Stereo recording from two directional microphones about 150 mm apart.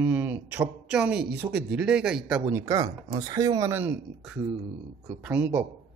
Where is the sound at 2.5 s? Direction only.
25° right (ahead or behind).